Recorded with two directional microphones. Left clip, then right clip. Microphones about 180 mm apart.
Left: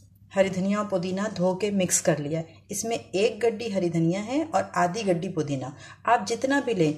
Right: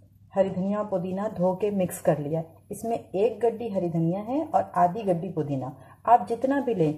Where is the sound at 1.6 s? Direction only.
Centre (ahead or behind).